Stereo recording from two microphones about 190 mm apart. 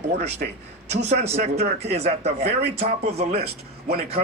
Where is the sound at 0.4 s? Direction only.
45° right (ahead or behind).